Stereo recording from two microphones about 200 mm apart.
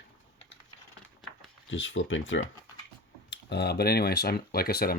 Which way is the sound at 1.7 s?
70° left (ahead or behind).